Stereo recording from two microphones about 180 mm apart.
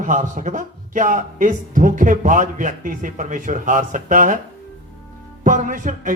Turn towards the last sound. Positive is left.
turn(degrees=-45)  # may be behind; listen again after turning